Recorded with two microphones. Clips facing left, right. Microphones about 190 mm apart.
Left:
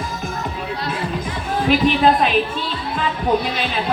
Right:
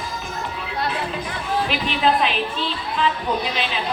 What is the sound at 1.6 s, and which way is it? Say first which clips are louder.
Speech: left 8 dB; 45° left (ahead or behind).